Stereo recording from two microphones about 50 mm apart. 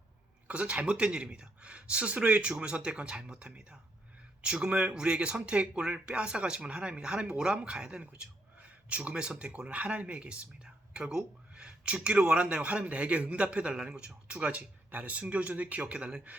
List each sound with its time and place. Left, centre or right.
0.4 s speech: right
10.9 s speech: centre